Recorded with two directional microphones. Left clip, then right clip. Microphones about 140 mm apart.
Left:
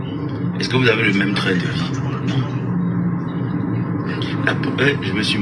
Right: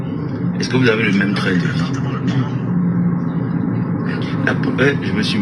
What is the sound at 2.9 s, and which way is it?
Vehicle, 40° right (ahead or behind).